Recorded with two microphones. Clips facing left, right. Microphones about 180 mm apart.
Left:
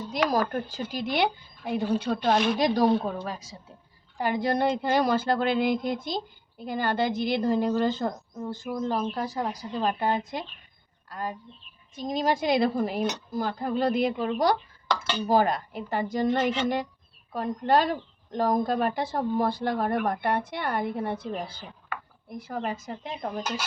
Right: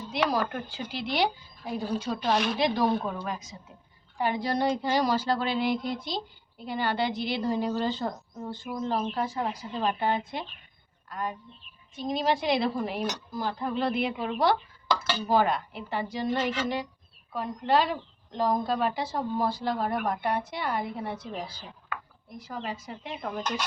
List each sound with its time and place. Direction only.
0.0 s a woman's voice: 45° left (ahead or behind); by 2.3 s 60° left (ahead or behind)
2.3 s a woman's voice: 40° left (ahead or behind)
3.0 s a woman's voice: 30° left (ahead or behind)
4.2 s a woman's voice: 45° left (ahead or behind)
23.4 s speech: 5° left (ahead or behind)